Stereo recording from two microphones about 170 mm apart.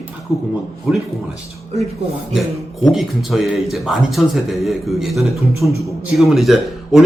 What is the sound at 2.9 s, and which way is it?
Speech, centre (ahead or behind).